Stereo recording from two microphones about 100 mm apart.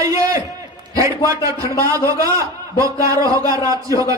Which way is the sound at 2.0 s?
30° right (ahead or behind).